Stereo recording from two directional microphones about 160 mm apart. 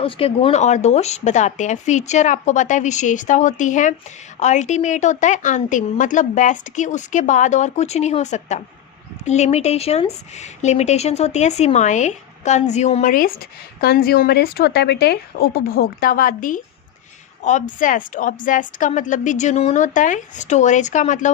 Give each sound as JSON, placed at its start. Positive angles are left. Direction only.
{"t": 0.0, "sound": "a woman's voice", "side_deg": 35}
{"t": 13.8, "sound": "a woman's voice", "side_deg": 75}